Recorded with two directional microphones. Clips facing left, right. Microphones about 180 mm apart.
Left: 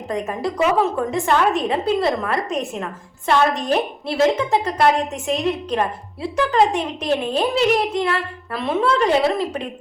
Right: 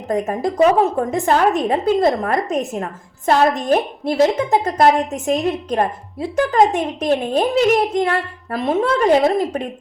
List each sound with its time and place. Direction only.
0.1 s a woman's voice: 40° right (ahead or behind)